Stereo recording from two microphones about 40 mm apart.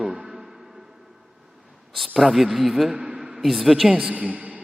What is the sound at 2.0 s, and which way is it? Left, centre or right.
Speech, centre.